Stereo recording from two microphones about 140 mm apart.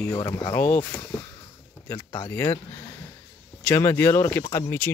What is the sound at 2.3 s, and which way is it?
Speech, 20° left (ahead or behind).